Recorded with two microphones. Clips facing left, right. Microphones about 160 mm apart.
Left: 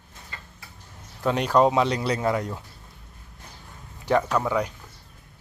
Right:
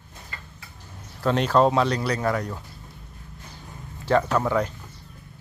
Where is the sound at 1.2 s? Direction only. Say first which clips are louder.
Even; 10° left (ahead or behind).